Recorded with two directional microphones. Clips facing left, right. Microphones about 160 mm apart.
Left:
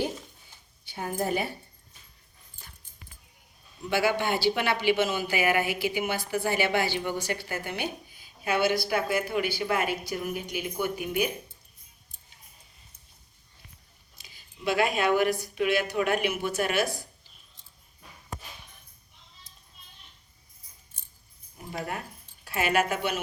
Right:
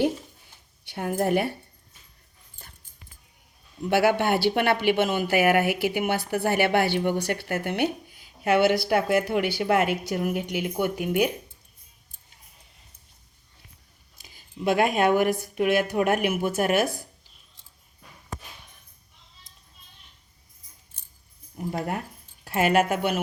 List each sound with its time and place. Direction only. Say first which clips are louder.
0.9 s speech: right 5 dB; 65° right (ahead or behind)
3.8 s speech: right 5 dB; 60° right (ahead or behind)
14.2 s speech: right 10 dB; 50° right (ahead or behind)
21.7 s speech: right 4 dB; 45° right (ahead or behind)